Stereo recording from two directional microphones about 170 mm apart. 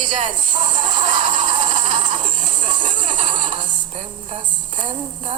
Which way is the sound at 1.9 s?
45° right (ahead or behind).